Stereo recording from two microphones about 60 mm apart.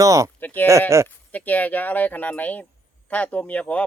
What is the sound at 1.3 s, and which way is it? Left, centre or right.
Speech, left.